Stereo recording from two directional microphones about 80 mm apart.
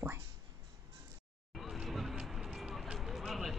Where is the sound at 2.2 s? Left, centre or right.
Centre.